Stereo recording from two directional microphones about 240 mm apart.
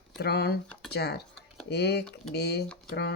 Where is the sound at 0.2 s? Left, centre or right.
Left.